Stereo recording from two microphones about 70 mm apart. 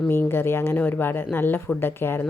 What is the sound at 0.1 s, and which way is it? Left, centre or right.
Speech, left.